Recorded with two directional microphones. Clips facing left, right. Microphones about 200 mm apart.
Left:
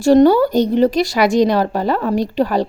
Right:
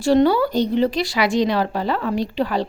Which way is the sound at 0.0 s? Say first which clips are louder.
Left 5 dB; 45° left (ahead or behind).